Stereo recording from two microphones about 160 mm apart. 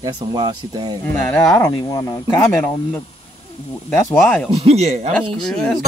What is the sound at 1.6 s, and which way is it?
Speech, 20° left (ahead or behind).